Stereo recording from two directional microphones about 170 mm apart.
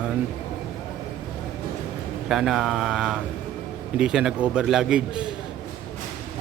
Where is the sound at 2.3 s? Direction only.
Centre (ahead or behind).